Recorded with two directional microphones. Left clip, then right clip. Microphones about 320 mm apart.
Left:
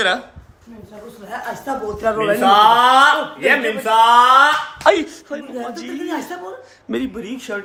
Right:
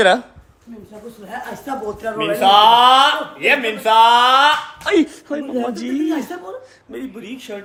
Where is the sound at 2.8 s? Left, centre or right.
Centre.